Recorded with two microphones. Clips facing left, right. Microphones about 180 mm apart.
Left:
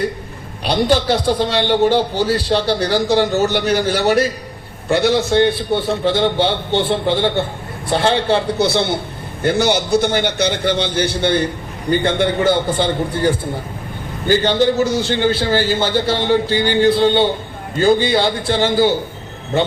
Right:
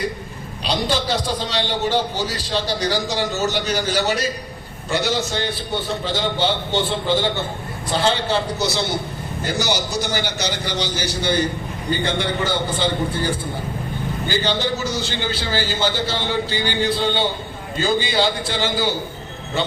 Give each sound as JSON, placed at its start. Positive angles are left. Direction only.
{"t": 0.6, "sound": "a man's voice", "side_deg": 60}
{"t": 14.3, "sound": "a man's voice", "side_deg": 50}